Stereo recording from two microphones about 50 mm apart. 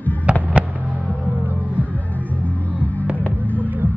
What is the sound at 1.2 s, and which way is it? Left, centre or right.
Music, right.